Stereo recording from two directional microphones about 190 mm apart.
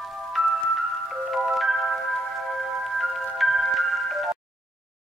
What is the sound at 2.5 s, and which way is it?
Music, centre (ahead or behind).